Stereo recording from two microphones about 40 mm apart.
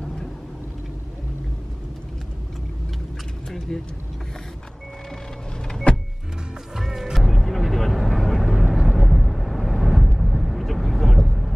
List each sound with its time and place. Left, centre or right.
3.4 s a sound: centre
5.9 s power windows: left
6.7 s music: centre